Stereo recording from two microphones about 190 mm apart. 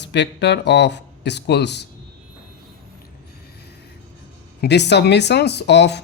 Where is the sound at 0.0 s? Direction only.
65° left (ahead or behind).